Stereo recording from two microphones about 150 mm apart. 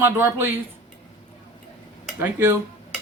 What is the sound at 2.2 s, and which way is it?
Speech, 15° right (ahead or behind).